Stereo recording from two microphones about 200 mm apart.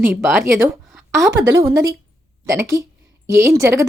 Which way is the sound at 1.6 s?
15° right (ahead or behind).